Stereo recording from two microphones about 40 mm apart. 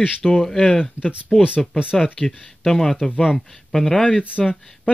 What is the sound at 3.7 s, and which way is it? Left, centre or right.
Speech, centre.